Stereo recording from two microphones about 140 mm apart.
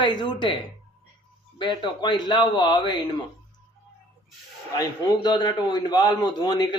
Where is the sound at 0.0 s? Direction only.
35° left (ahead or behind).